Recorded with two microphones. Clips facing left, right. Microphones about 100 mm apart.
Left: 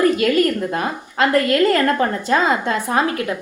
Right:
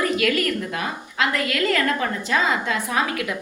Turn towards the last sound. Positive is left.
turn(degrees=35)  # may be behind; listen again after turning